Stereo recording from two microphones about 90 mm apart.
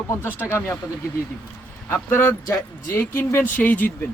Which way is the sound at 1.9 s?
25° left (ahead or behind).